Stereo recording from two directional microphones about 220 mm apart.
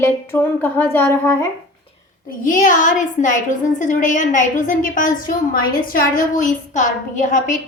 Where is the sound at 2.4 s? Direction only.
35° left (ahead or behind).